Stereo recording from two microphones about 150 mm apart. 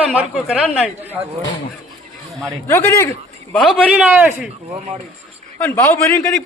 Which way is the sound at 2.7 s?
20° left (ahead or behind).